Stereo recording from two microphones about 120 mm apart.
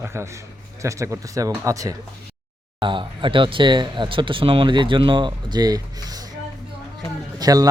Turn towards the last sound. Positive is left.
turn(degrees=-35)  # may be behind; listen again after turning